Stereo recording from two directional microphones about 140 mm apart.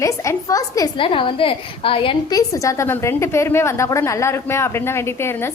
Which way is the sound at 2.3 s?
25° left (ahead or behind).